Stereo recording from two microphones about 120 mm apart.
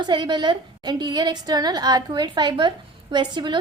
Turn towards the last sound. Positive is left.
turn(degrees=-40)  # may be behind; listen again after turning